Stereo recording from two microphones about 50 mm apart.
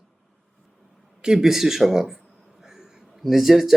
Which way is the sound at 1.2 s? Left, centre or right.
Centre.